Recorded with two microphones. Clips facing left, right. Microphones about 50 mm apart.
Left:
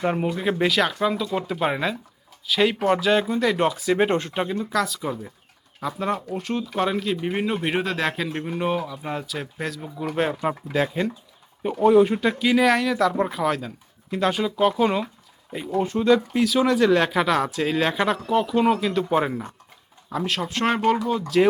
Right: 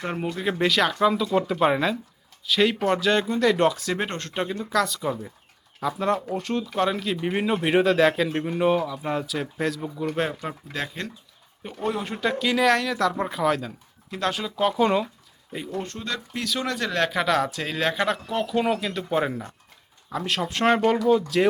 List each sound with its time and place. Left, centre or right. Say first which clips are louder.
0.0 s speech: left 4 dB; centre